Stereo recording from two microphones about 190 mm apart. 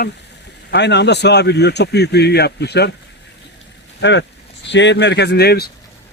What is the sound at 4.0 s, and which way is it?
Speech, 70° left (ahead or behind).